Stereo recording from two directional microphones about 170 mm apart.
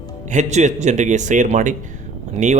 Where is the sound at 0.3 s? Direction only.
45° right (ahead or behind).